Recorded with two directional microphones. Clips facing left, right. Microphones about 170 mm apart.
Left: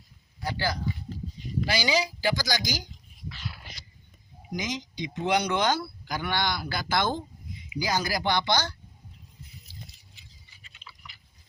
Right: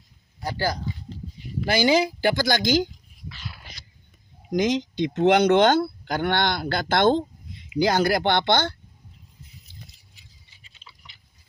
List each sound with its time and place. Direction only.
0.3 s speech: 45° right (ahead or behind); by 2.8 s 60° right (ahead or behind)
4.4 s speech: 55° right (ahead or behind)
10.6 s a sound: 30° right (ahead or behind)